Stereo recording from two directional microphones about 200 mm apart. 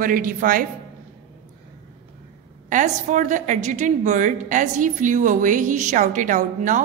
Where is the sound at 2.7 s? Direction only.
40° right (ahead or behind).